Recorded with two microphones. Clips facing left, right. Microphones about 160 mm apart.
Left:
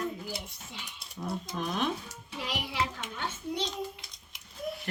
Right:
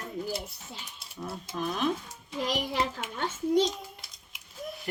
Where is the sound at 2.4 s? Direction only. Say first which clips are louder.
Right 4 dB; 40° right (ahead or behind).